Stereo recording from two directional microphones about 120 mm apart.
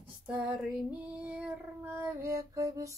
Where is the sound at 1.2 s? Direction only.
10° right (ahead or behind); by 2.9 s 25° right (ahead or behind).